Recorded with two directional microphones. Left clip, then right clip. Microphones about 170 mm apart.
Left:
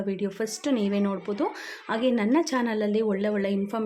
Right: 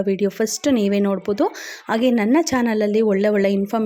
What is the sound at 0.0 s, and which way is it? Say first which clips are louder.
Speech: right 9 dB; 40° right (ahead or behind).